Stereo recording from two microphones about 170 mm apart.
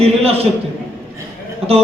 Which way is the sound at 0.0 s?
35° right (ahead or behind).